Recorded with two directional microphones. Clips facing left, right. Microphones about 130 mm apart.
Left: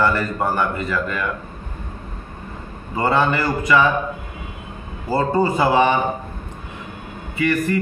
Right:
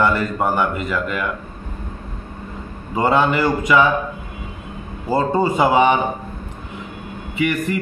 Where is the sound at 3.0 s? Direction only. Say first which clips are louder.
Right 2 dB; 15° right (ahead or behind).